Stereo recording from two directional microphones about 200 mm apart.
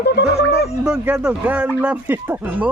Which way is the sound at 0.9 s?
5° right (ahead or behind).